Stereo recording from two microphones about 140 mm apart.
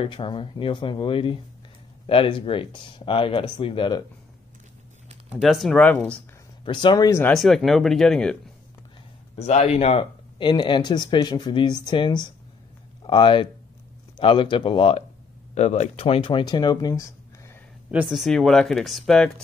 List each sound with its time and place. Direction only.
0.0 s speech: 35° left (ahead or behind)
5.4 s speech: centre (ahead or behind)
6.6 s speech: 35° left (ahead or behind)
7.1 s speech: 15° left (ahead or behind)
7.3 s speech: centre (ahead or behind)
9.3 s speech: 50° left (ahead or behind)
15.5 s speech: 55° left (ahead or behind); by 17.1 s 25° left (ahead or behind)
18.0 s speech: centre (ahead or behind)